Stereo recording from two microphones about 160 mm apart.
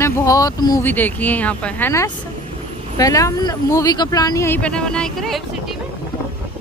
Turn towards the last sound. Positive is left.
turn(degrees=0)  # may be behind; listen again after turning